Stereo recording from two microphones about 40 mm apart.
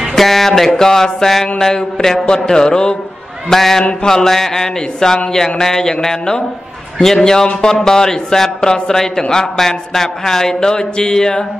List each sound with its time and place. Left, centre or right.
0.1 s speech: centre
2.2 s speech: left